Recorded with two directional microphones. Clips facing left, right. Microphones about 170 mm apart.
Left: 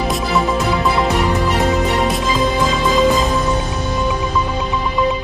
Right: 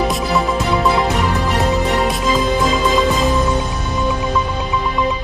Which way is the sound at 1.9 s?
Centre (ahead or behind).